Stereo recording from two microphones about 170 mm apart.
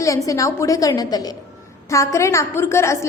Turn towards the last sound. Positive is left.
turn(degrees=15)  # may be behind; listen again after turning